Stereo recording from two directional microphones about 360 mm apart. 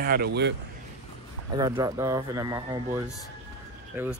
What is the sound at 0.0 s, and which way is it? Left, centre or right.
Speech, right.